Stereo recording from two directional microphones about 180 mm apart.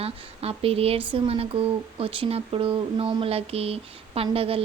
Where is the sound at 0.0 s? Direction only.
35° right (ahead or behind).